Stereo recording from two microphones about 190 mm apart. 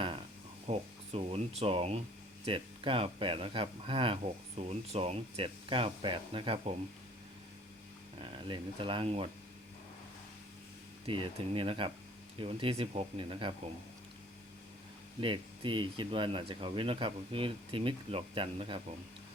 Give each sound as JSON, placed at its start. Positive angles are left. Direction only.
{"t": 0.7, "sound": "speech", "side_deg": -30}
{"t": 8.2, "sound": "speech", "side_deg": -25}
{"t": 11.0, "sound": "speech", "side_deg": -30}
{"t": 15.2, "sound": "speech", "side_deg": -25}